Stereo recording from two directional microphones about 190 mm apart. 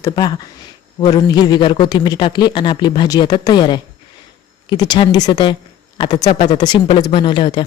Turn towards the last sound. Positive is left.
turn(degrees=25)  # may be behind; listen again after turning